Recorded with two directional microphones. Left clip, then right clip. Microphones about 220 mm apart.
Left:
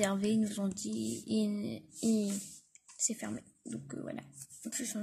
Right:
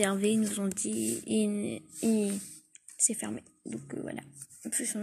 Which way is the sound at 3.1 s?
Centre (ahead or behind).